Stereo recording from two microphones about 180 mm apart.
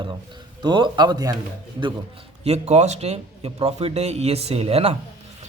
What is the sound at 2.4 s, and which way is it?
A man's voice, 35° right (ahead or behind).